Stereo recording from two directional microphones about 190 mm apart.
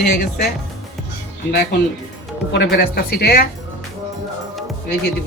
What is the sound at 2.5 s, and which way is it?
Speech, 65° left (ahead or behind).